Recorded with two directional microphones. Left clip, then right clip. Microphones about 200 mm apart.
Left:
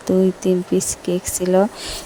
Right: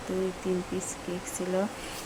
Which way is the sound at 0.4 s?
45° left (ahead or behind).